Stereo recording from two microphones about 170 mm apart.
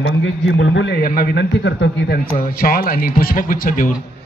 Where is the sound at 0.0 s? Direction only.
90° left.